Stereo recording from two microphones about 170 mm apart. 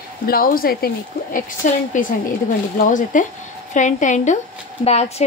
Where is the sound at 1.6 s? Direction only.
50° left (ahead or behind).